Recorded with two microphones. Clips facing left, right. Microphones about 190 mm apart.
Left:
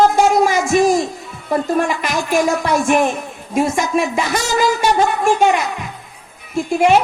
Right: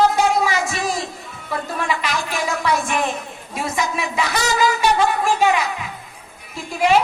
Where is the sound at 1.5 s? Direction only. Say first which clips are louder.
Left 7 dB; 50° left (ahead or behind).